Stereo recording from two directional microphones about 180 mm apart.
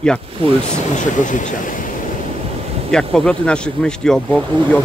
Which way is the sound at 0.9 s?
45° left (ahead or behind).